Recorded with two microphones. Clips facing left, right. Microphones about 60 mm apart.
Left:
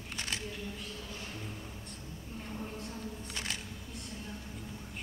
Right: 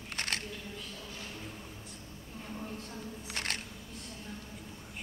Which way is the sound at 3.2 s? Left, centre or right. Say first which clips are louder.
Right 5 dB; right.